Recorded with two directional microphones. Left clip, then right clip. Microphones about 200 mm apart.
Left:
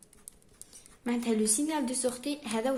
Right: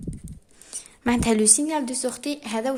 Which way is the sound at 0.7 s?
45° right (ahead or behind).